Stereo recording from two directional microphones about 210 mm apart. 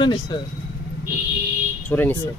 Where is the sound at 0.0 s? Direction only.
20° left (ahead or behind).